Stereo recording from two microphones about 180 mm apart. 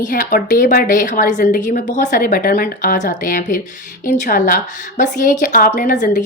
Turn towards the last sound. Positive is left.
turn(degrees=45)  # may be behind; listen again after turning